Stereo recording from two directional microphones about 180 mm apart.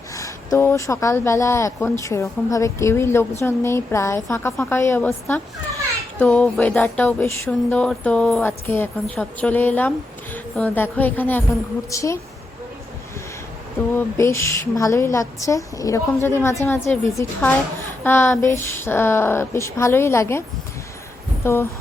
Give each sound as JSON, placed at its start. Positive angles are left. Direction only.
{"t": 0.1, "sound": "speech", "side_deg": 15}
{"t": 13.9, "sound": "speech", "side_deg": 15}
{"t": 21.4, "sound": "speech", "side_deg": 15}